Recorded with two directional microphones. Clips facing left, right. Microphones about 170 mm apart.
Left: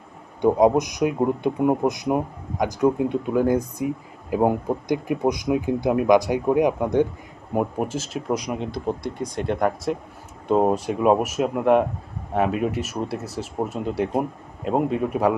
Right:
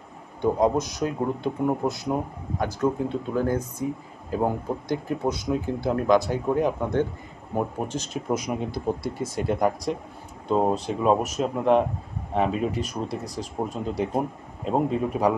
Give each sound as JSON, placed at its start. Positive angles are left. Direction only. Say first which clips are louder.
{"t": 0.4, "sound": "speech", "louder": "left 5 dB", "side_deg": 15}
{"t": 10.5, "sound": "speech", "louder": "left 3 dB", "side_deg": 10}